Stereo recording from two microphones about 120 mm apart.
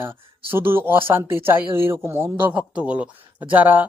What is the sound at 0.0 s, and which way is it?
Speech, 20° right (ahead or behind).